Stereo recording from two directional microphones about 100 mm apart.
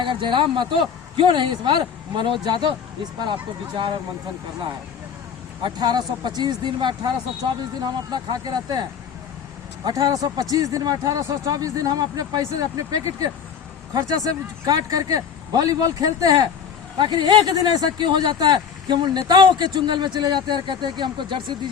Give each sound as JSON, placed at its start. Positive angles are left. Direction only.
{"t": 0.0, "sound": "speech", "side_deg": -55}
{"t": 5.6, "sound": "speech", "side_deg": -45}